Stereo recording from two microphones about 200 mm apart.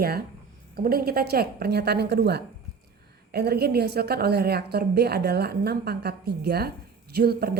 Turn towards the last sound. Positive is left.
turn(degrees=-50)  # may be behind; listen again after turning